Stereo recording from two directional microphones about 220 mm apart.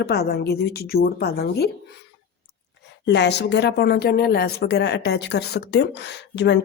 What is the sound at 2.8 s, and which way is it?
Speech, 50° left (ahead or behind).